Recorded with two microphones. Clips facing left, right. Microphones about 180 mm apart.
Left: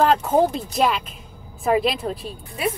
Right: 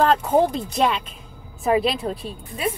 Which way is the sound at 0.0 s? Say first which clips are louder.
Even; 5° left (ahead or behind).